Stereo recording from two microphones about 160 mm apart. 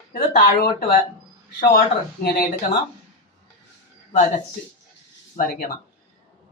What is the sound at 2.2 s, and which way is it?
Speech, 65° left (ahead or behind).